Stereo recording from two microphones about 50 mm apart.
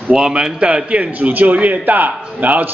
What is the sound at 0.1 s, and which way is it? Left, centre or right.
A man's voice, centre.